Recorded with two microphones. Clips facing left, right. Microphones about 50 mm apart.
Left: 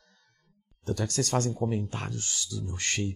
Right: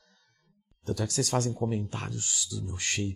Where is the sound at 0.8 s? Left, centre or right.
Centre.